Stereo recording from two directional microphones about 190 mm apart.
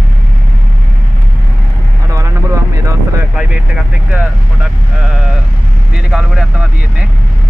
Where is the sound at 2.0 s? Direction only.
15° right (ahead or behind).